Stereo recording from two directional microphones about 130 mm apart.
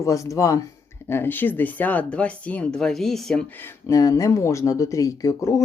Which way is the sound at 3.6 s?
25° left (ahead or behind).